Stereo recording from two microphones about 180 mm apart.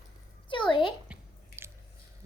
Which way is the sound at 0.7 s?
25° left (ahead or behind).